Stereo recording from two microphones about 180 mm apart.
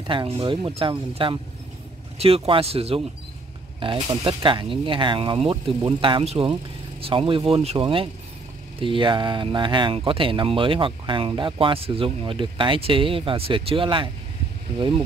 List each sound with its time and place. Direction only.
0.0 s speech: 25° right (ahead or behind)